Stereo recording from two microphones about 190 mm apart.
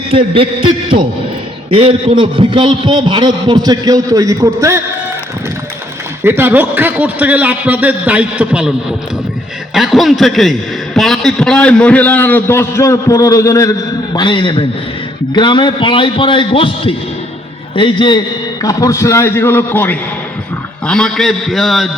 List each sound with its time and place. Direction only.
0.1 s a man's voice: 30° right (ahead or behind)
6.2 s a man's voice: 10° right (ahead or behind)
9.7 s a man's voice: centre (ahead or behind)